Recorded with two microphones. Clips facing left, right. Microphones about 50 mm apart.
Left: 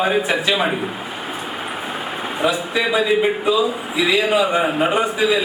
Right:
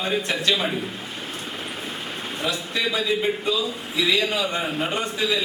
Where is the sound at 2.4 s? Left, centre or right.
Centre.